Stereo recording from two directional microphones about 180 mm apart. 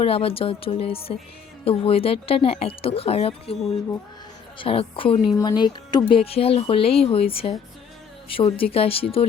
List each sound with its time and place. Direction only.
0.0 s a woman's voice: 30° left (ahead or behind)